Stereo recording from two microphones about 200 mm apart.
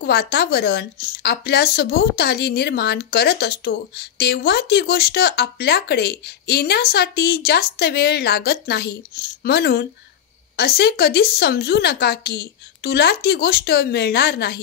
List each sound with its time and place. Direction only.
0.0 s speech: 55° left (ahead or behind)